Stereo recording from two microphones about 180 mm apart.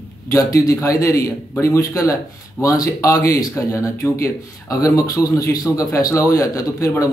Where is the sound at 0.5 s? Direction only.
15° left (ahead or behind).